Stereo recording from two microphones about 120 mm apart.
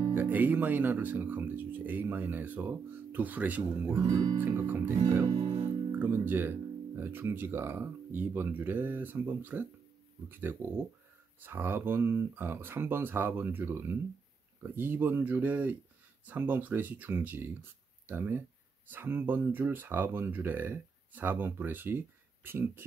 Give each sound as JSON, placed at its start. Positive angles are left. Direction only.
{"t": 0.1, "sound": "speech", "side_deg": -15}
{"t": 4.0, "sound": "speech", "side_deg": -50}
{"t": 4.4, "sound": "speech", "side_deg": -15}
{"t": 5.0, "sound": "music", "side_deg": -55}
{"t": 5.9, "sound": "speech", "side_deg": -15}